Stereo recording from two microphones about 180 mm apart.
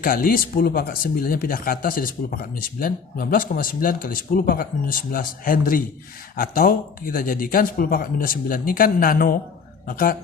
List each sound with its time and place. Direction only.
0.0 s speech: 55° left (ahead or behind)